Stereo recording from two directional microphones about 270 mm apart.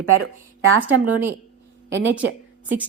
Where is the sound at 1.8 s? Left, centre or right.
Right.